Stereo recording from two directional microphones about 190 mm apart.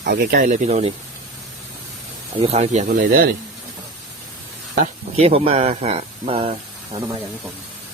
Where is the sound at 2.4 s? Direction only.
35° right (ahead or behind).